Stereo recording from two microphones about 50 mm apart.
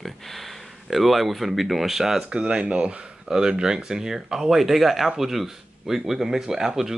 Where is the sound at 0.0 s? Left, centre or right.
Centre.